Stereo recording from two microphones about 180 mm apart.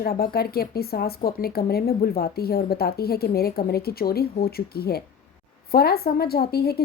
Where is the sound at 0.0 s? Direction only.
60° left (ahead or behind).